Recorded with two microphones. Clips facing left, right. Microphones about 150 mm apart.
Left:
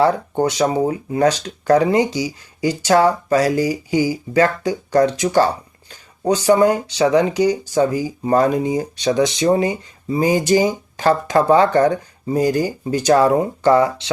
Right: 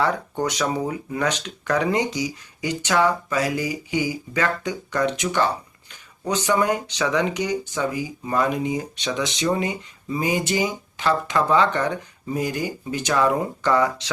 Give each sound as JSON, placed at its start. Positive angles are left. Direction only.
{"t": 0.0, "sound": "speech", "side_deg": 30}